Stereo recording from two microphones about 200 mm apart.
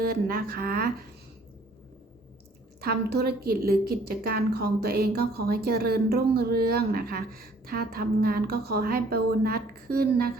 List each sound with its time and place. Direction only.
0.0 s a woman's voice: 50° right (ahead or behind)
2.8 s a woman's voice: 55° right (ahead or behind)